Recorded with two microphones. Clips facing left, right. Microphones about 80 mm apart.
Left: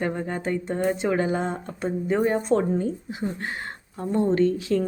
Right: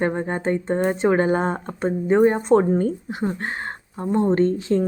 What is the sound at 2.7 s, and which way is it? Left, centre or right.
A woman's voice, right.